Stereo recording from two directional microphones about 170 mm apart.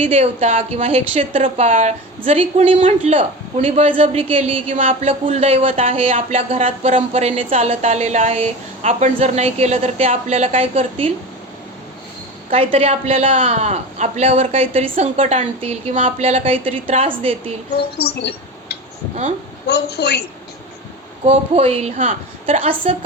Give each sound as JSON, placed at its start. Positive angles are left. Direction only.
{"t": 0.0, "sound": "speech", "side_deg": -35}
{"t": 1.4, "sound": "speech", "side_deg": -45}
{"t": 12.5, "sound": "speech", "side_deg": -35}
{"t": 17.9, "sound": "a woman's voice", "side_deg": 65}
{"t": 21.2, "sound": "speech", "side_deg": -35}